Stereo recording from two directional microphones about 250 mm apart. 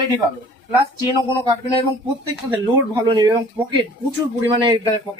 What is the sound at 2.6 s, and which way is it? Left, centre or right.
Speech, centre.